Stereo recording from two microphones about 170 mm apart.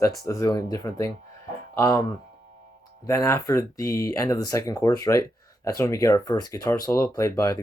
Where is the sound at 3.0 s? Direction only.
15° left (ahead or behind).